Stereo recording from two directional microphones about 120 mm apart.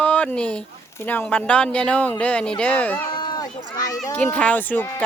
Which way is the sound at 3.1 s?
40° left (ahead or behind).